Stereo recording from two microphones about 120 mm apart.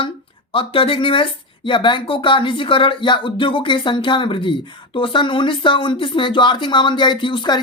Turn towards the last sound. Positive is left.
turn(degrees=40)  # may be behind; listen again after turning